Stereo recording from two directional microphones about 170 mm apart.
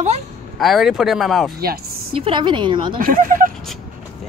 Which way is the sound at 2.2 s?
30° right (ahead or behind).